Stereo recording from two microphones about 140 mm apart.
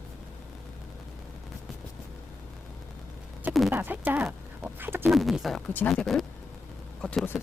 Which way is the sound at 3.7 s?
15° right (ahead or behind).